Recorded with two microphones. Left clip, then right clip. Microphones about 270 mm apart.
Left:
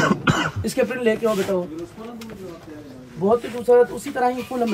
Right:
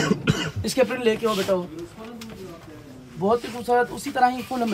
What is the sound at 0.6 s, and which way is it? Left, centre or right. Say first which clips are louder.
Speech: right 2 dB; centre.